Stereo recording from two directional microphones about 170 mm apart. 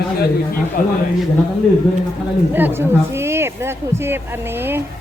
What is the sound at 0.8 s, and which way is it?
Speech, 50° left (ahead or behind).